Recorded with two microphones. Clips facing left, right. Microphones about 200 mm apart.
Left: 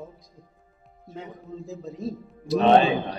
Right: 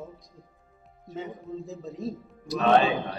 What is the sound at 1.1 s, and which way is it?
A man's voice, centre (ahead or behind).